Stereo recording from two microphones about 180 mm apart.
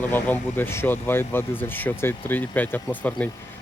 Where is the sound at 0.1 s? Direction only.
10° left (ahead or behind).